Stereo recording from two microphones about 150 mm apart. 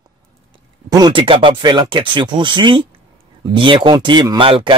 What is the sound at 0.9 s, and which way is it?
Speech, 30° right (ahead or behind).